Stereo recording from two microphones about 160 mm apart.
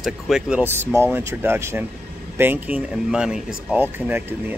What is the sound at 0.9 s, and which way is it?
Speech, 15° right (ahead or behind).